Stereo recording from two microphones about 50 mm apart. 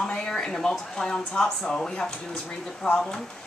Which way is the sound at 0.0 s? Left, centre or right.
Centre.